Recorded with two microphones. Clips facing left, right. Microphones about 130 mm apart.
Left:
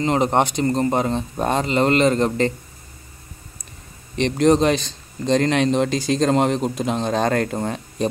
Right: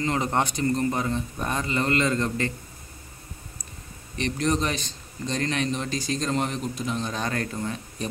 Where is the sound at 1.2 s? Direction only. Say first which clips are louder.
Left 8 dB; 80° left.